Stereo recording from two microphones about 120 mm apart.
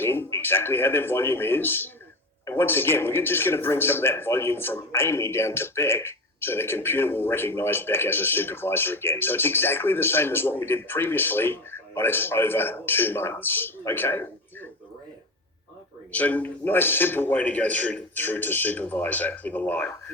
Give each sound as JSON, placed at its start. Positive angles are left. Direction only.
{"t": 0.0, "sound": "speech", "side_deg": 20}
{"t": 16.1, "sound": "a man's voice", "side_deg": 10}